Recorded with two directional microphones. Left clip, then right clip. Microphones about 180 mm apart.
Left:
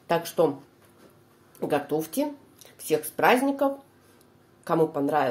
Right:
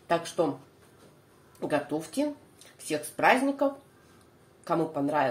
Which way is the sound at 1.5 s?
45° left (ahead or behind).